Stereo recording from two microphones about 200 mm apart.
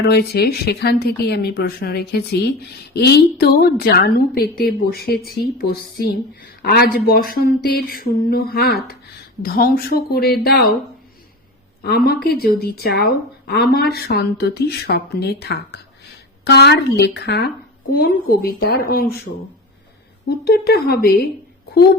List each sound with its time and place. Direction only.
0.1 s speech: 55° left (ahead or behind)
11.8 s a woman's voice: 50° left (ahead or behind)